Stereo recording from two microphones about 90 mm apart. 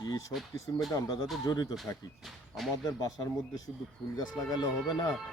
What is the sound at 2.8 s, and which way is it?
Speech, 40° left (ahead or behind).